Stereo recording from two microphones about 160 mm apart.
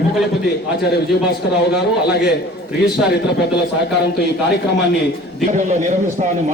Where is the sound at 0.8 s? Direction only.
90° left.